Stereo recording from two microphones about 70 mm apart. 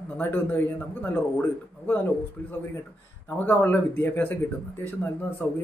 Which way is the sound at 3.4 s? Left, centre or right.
Left.